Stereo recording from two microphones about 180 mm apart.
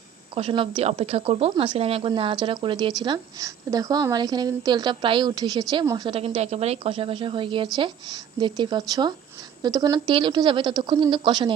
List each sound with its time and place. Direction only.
0.3 s a woman's voice: 30° right (ahead or behind)
6.1 s speech: 30° right (ahead or behind)